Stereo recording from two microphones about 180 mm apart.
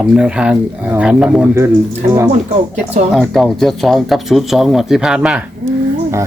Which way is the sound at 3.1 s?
Centre (ahead or behind).